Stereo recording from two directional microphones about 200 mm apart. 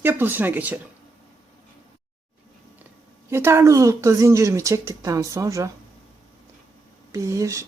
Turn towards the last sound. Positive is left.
turn(degrees=-15)  # may be behind; listen again after turning